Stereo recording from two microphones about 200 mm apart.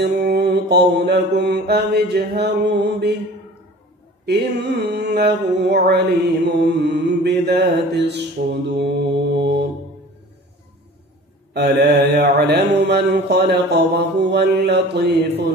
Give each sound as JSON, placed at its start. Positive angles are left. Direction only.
{"t": 0.0, "sound": "music", "side_deg": -55}
{"t": 4.3, "sound": "music", "side_deg": -55}
{"t": 8.7, "sound": "mantra", "side_deg": -60}
{"t": 11.5, "sound": "music", "side_deg": -55}